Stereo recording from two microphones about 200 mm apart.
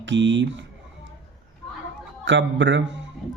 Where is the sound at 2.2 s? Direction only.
65° right (ahead or behind).